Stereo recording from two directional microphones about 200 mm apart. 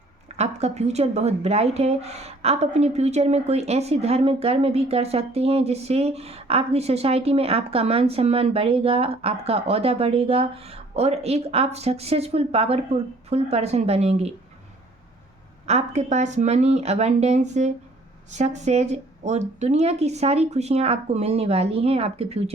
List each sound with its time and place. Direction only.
0.3 s a woman's voice: 35° right (ahead or behind)
15.6 s a woman's voice: 35° right (ahead or behind)